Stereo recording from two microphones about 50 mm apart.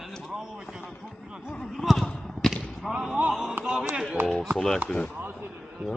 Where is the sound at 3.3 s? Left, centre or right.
Centre.